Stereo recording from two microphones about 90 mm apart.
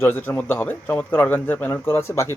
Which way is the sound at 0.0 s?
20° left (ahead or behind).